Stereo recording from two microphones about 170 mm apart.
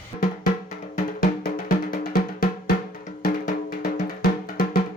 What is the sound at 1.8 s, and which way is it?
Music, 55° left (ahead or behind).